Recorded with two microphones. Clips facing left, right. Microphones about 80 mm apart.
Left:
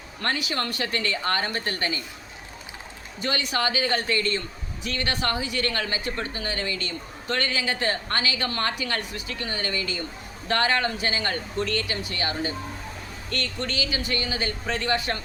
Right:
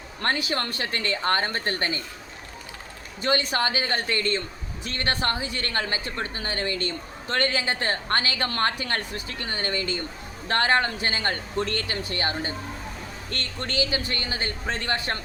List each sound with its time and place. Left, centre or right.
0.2 s a woman's voice: right
3.2 s a woman's voice: right